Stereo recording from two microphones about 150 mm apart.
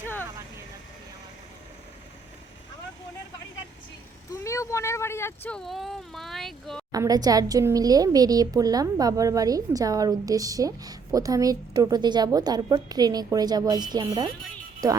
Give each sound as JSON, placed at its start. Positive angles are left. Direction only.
{"t": 4.4, "sound": "speech", "side_deg": 20}
{"t": 6.9, "sound": "a woman's voice", "side_deg": -25}